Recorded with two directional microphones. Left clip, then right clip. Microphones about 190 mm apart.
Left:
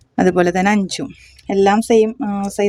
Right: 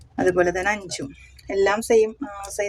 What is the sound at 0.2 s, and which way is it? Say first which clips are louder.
Speech: left 5 dB; 55° left (ahead or behind).